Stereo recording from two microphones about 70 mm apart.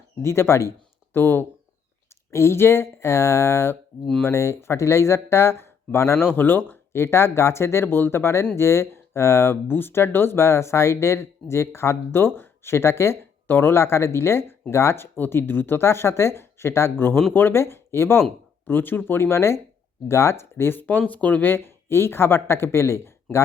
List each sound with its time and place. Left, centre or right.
0.2 s speech: left